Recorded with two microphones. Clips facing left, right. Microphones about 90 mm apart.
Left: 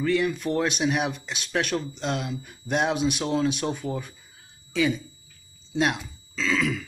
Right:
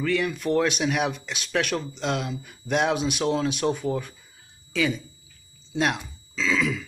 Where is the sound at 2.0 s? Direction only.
50° right (ahead or behind).